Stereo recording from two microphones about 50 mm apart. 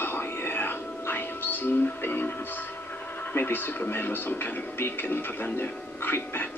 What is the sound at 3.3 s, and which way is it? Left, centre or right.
Speech, left.